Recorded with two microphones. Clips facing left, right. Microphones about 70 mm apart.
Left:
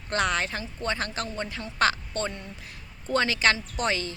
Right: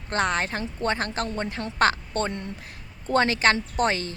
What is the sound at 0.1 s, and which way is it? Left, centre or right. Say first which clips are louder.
A woman's voice: right 2 dB; right.